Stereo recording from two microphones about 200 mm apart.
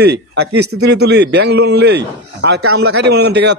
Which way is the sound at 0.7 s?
60° right (ahead or behind).